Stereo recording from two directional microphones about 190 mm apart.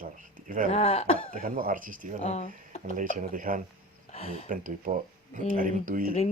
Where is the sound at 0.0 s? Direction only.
45° right (ahead or behind).